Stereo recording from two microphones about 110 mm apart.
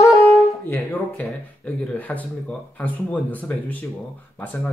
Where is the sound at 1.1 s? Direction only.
10° left (ahead or behind).